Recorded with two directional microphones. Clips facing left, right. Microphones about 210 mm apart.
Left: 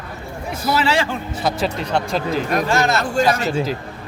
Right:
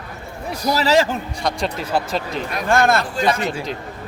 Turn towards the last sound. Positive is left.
turn(degrees=0)  # may be behind; listen again after turning